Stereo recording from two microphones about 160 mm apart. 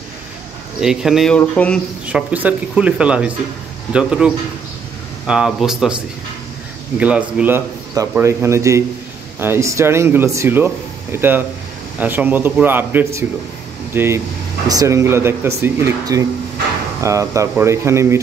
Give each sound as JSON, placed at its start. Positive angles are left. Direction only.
{"t": 0.7, "sound": "speech", "side_deg": -5}
{"t": 2.0, "sound": "speech", "side_deg": -10}
{"t": 7.0, "sound": "speech", "side_deg": -10}